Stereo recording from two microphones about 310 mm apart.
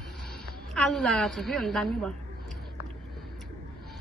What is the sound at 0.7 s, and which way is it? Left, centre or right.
A woman's voice, centre.